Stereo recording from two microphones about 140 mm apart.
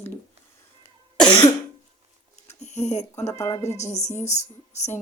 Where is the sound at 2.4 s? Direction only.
50° left (ahead or behind).